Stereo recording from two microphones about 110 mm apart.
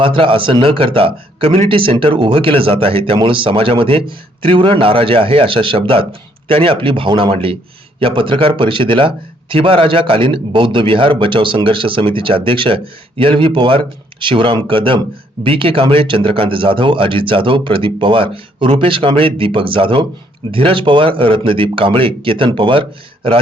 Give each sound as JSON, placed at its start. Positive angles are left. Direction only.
{"t": 0.0, "sound": "a man's voice", "side_deg": -50}